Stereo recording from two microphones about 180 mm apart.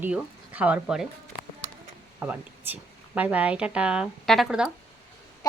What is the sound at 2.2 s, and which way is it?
A child's voice, 10° right (ahead or behind).